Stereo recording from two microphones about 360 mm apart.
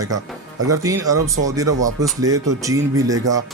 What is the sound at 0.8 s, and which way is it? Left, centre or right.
Speech, centre.